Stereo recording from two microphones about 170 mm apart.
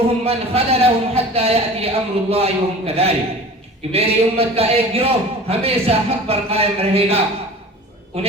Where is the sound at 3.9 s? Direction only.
35° right (ahead or behind).